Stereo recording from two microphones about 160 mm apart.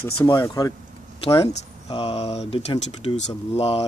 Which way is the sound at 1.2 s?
35° left (ahead or behind).